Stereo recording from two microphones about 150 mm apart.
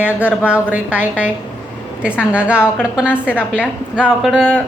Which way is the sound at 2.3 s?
10° right (ahead or behind).